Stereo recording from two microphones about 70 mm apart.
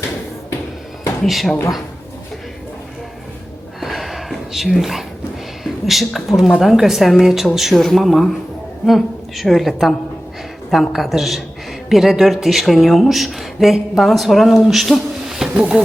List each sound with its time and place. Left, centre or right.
1.2 s speech: centre
3.8 s a sound: centre
5.6 s speech: centre
15.5 s speech: centre